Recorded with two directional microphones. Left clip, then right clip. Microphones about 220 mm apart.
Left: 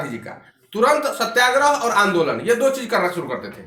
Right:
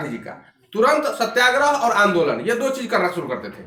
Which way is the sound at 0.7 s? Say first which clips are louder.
Even; 20° left (ahead or behind).